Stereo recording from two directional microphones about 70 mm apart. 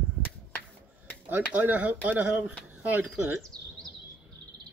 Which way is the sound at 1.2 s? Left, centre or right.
Right.